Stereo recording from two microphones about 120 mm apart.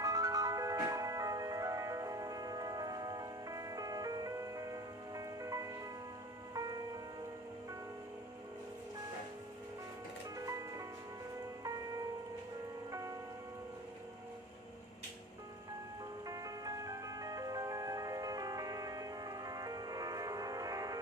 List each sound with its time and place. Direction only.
0.0 s music: 30° right (ahead or behind)
16.3 s music: 30° right (ahead or behind)